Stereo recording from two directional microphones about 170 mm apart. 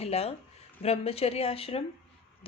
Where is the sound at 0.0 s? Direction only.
35° left (ahead or behind).